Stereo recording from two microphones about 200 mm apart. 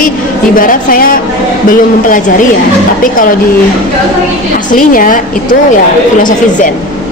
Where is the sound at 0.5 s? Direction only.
45° left (ahead or behind).